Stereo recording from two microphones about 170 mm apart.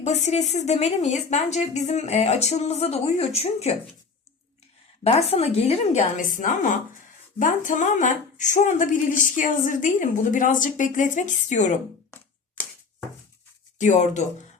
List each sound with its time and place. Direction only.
0.0 s a woman's voice: 40° left (ahead or behind)
5.0 s a woman's voice: 40° left (ahead or behind)
13.7 s a woman's voice: 45° left (ahead or behind)